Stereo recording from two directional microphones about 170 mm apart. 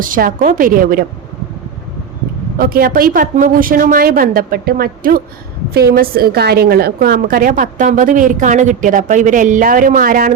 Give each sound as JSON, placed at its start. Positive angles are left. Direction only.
{"t": 0.0, "sound": "a woman's voice", "side_deg": -55}
{"t": 2.6, "sound": "a woman's voice", "side_deg": -60}